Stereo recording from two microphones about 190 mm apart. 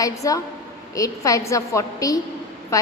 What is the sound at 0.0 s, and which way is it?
A woman's voice, 15° left (ahead or behind).